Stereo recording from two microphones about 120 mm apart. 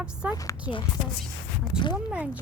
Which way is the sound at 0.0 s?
10° right (ahead or behind).